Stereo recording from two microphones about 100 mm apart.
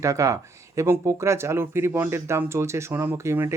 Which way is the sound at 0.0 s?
30° right (ahead or behind).